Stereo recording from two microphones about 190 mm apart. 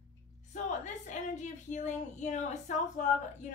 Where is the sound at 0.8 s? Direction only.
40° left (ahead or behind).